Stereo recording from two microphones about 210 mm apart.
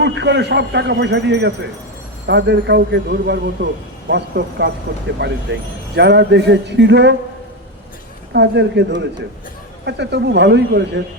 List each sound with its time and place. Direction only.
0.0 s speech: 55° right (ahead or behind)
8.3 s speech: 55° right (ahead or behind)